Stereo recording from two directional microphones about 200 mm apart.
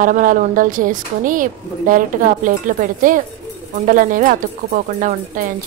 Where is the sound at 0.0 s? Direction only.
40° right (ahead or behind).